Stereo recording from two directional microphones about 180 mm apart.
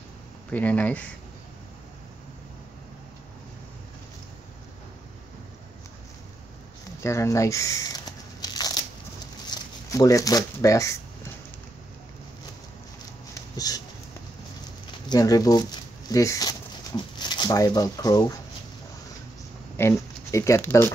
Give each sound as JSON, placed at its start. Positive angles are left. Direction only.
{"t": 0.5, "sound": "speech", "side_deg": 10}
{"t": 7.0, "sound": "crumpling", "side_deg": 15}
{"t": 9.5, "sound": "speech", "side_deg": 20}
{"t": 13.3, "sound": "a sound", "side_deg": 20}
{"t": 15.0, "sound": "speech", "side_deg": 20}
{"t": 19.8, "sound": "speech", "side_deg": 15}